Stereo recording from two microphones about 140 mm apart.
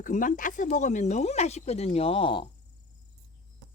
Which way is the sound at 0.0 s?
70° left (ahead or behind).